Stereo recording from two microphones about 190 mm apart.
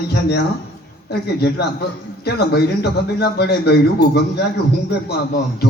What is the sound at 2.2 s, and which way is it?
Speech, 55° left (ahead or behind).